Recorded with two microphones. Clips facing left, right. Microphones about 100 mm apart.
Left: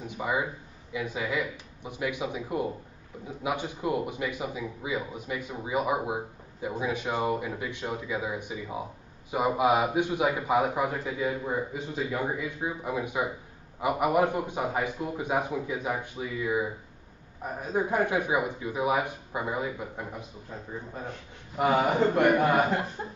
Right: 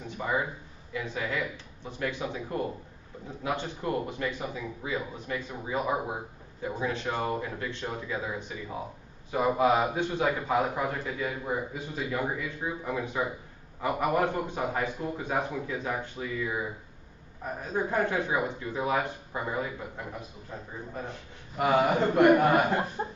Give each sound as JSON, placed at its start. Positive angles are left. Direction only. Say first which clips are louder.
{"t": 0.2, "sound": "a man's voice", "louder": "left 1 dB", "side_deg": 10}
{"t": 21.5, "sound": "a man's voice", "louder": "even", "side_deg": 10}
{"t": 23.0, "sound": "a sound", "louder": "right 4 dB", "side_deg": -30}